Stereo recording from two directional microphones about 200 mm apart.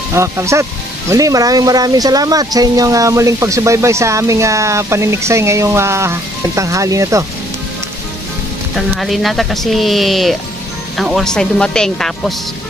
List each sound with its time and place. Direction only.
0.1 s speech: 15° right (ahead or behind)
8.7 s speech: centre (ahead or behind)